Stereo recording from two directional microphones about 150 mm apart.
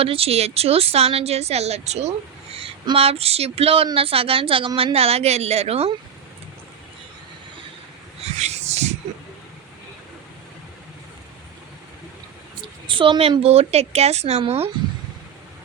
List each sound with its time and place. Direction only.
0.0 s a woman's voice: 40° right (ahead or behind)
8.2 s wheeze: 45° right (ahead or behind)
12.6 s a woman's voice: 35° right (ahead or behind)